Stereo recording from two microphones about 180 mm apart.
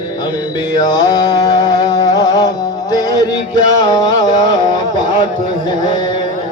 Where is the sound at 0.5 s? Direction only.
20° left (ahead or behind).